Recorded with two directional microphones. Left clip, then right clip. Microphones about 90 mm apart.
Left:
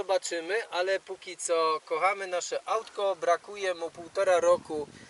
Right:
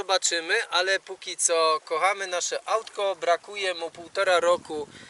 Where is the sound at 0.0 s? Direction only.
5° right (ahead or behind).